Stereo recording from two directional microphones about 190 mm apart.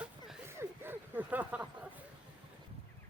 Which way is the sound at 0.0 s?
10° right (ahead or behind).